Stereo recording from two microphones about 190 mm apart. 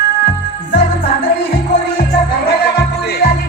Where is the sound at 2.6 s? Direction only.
60° left (ahead or behind).